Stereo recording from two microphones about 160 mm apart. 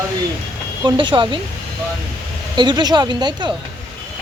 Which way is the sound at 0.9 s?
30° right (ahead or behind).